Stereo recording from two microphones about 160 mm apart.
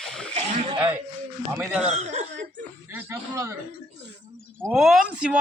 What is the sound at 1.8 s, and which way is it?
Speech, 45° right (ahead or behind).